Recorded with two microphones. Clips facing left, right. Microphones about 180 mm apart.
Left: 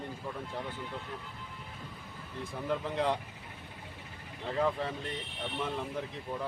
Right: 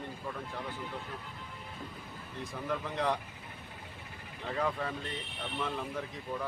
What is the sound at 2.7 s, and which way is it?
Speech, 25° left (ahead or behind).